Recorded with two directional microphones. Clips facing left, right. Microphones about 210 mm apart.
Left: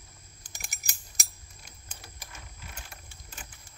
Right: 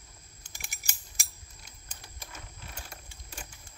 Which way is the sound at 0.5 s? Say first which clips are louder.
Left 1 dB; 45° left (ahead or behind).